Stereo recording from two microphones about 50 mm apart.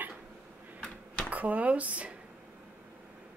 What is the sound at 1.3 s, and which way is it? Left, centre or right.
Speech, right.